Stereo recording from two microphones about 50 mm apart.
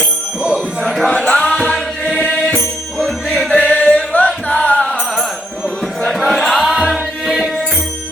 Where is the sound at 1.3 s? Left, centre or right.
Centre.